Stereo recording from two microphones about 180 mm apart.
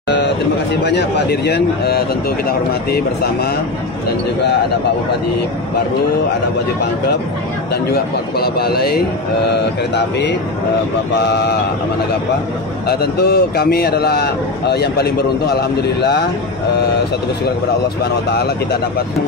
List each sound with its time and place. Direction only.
0.8 s a man's voice: 65° left (ahead or behind)
7.7 s a man's voice: 60° left (ahead or behind)
9.9 s a man's voice: 75° left (ahead or behind)
12.8 s a man's voice: 60° left (ahead or behind)